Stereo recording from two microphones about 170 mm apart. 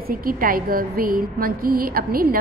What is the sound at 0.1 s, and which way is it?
A woman's voice, 55° right (ahead or behind).